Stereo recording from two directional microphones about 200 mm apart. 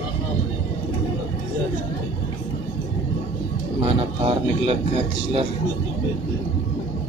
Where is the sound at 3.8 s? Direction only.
25° right (ahead or behind).